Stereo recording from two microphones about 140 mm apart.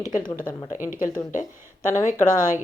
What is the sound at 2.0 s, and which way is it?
Speech, 55° left (ahead or behind).